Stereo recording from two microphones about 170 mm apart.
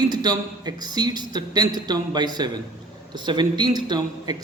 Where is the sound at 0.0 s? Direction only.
25° right (ahead or behind).